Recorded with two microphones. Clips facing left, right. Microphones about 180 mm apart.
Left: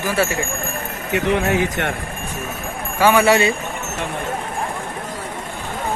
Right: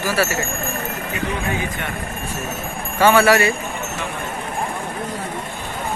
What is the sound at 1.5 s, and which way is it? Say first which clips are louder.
Speech: left 6 dB; 80° left.